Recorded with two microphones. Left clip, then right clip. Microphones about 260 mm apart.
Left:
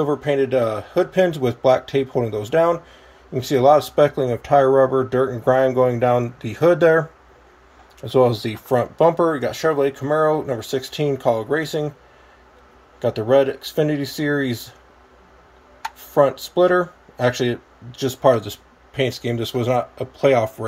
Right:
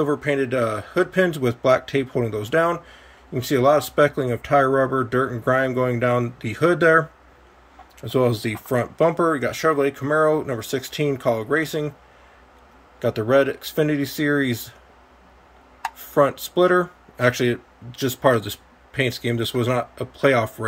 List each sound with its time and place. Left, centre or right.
0.1 s speech: centre
8.5 s speech: right
10.0 s speech: centre
13.0 s speech: centre
16.2 s speech: centre